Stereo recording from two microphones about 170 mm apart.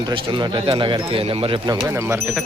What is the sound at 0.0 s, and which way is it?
Speech, 30° right (ahead or behind).